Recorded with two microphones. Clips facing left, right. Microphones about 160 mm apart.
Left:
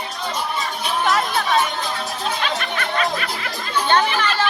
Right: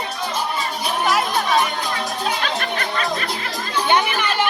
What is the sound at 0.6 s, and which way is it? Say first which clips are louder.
Music: even; 5° right (ahead or behind).